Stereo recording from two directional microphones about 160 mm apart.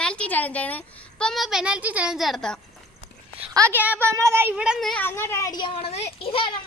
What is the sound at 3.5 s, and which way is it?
A woman's voice, 15° right (ahead or behind).